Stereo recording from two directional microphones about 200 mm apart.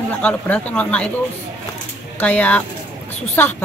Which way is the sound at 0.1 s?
5° left (ahead or behind).